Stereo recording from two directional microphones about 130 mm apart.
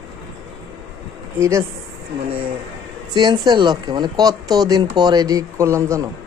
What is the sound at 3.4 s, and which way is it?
Speech, 35° right (ahead or behind).